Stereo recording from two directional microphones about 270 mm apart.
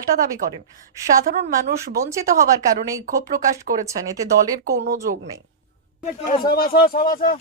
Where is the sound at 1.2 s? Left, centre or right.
Right.